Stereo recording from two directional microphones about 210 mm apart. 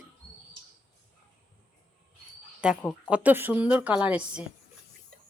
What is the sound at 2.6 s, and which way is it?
A woman's voice, 5° right (ahead or behind).